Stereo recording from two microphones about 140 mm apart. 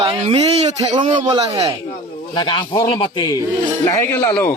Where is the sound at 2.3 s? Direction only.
35° left (ahead or behind); by 4.6 s 15° left (ahead or behind).